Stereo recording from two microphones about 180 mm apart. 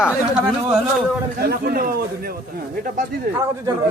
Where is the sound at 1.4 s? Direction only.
55° right (ahead or behind).